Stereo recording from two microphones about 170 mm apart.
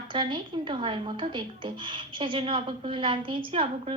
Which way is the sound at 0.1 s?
30° right (ahead or behind).